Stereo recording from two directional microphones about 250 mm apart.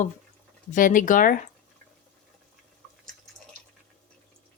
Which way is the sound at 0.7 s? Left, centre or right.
Left.